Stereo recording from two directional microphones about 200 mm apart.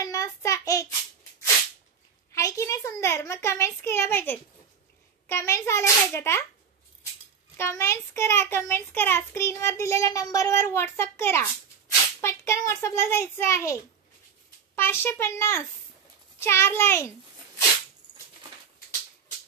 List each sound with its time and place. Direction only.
0.0 s child singing: 15° left (ahead or behind)
2.3 s a child's voice: 15° left (ahead or behind)
7.5 s a child's voice: 15° left (ahead or behind)
14.8 s a child's voice: 10° left (ahead or behind)